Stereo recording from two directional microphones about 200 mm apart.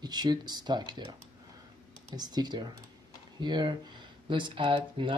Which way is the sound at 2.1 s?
20° right (ahead or behind).